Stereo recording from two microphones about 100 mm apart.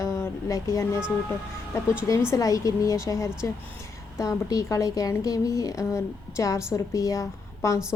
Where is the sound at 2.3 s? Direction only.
35° left (ahead or behind).